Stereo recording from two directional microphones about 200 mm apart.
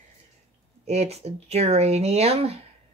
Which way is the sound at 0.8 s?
35° right (ahead or behind).